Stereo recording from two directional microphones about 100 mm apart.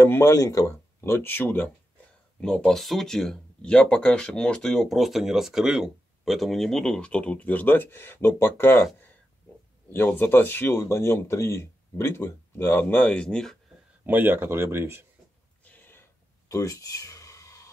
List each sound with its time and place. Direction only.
0.0 s speech: 25° left (ahead or behind)
2.4 s speech: 5° left (ahead or behind)
9.8 s speech: 20° left (ahead or behind)
14.0 s speech: 20° right (ahead or behind)
15.6 s a sound: 15° left (ahead or behind)
16.4 s a sound: 35° left (ahead or behind)